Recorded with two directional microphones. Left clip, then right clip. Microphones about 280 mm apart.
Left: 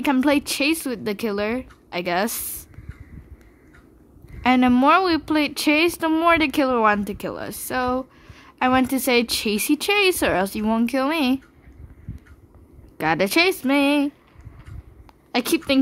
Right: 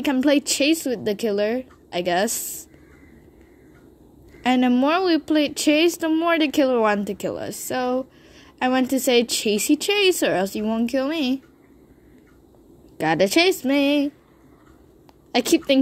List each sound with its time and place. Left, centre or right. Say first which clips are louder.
0.0 s a woman's voice: even; centre
4.4 s a woman's voice: left 2 dB; left
12.9 s a woman's voice: right 1 dB; centre
15.3 s a woman's voice: right 2 dB; centre